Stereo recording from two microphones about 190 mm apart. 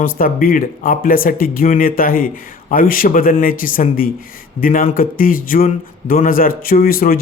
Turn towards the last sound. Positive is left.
turn(degrees=50)  # may be behind; listen again after turning